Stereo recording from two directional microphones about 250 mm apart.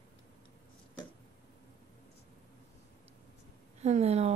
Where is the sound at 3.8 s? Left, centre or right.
Right.